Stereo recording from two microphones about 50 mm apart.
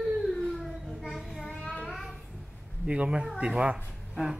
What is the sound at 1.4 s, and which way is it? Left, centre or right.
Child singing, left.